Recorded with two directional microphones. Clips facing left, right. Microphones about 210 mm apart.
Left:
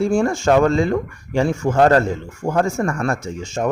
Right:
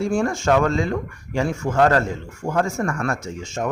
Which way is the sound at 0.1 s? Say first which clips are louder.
Left 3 dB; 30° left (ahead or behind).